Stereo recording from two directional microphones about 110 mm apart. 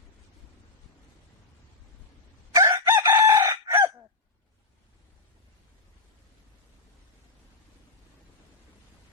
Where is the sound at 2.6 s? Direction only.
25° right (ahead or behind).